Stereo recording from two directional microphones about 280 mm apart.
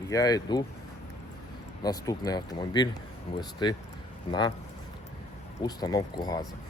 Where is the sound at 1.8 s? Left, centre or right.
Centre.